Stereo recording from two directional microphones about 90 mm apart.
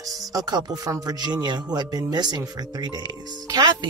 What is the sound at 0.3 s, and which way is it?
Speech, 45° right (ahead or behind).